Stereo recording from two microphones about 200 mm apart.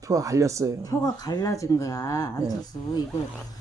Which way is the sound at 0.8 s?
15° left (ahead or behind).